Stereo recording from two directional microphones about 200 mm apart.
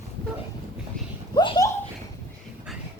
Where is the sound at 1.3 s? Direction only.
20° left (ahead or behind).